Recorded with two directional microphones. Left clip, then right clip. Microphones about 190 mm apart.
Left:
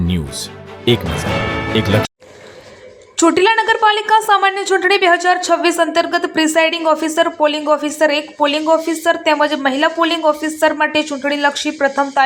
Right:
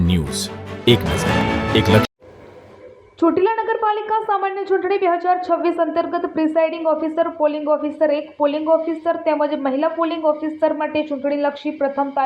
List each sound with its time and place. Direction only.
0.0 s music: centre (ahead or behind)
1.7 s speech: centre (ahead or behind)
3.2 s a woman's voice: 15° left (ahead or behind)